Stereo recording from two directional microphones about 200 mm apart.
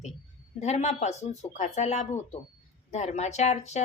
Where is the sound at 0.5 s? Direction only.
35° left (ahead or behind).